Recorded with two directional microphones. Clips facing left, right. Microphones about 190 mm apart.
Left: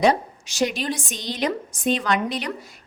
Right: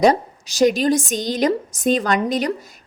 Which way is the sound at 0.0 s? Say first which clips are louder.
Right 4 dB; 40° right (ahead or behind).